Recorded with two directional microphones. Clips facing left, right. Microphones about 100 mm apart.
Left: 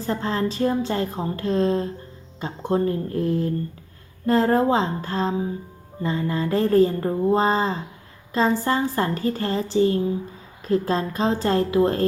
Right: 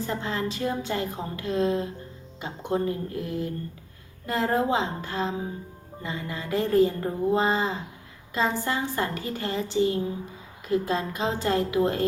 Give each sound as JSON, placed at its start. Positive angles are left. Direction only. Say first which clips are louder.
{"t": 0.0, "sound": "speech", "louder": "left 5 dB", "side_deg": 35}